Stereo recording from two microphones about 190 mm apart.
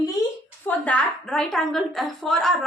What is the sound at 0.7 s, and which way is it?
A woman's voice, 5° left (ahead or behind).